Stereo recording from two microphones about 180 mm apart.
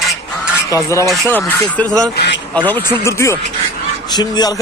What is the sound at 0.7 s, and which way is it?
Speech, 15° left (ahead or behind).